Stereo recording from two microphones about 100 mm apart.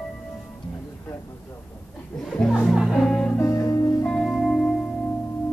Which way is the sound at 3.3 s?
25° left (ahead or behind).